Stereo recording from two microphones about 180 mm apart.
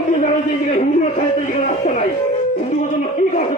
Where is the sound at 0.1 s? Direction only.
40° left (ahead or behind).